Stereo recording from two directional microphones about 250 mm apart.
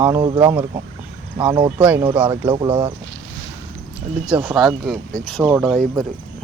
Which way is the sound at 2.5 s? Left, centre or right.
Right.